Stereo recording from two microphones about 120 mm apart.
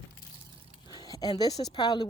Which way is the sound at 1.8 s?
40° left (ahead or behind).